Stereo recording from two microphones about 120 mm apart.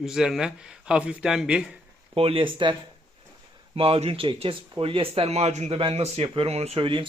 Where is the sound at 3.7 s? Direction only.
50° right (ahead or behind); by 5.8 s 70° right (ahead or behind).